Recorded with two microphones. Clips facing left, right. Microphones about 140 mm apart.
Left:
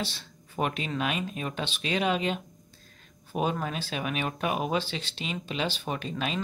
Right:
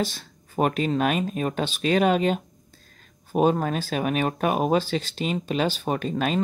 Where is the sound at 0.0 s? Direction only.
45° right (ahead or behind).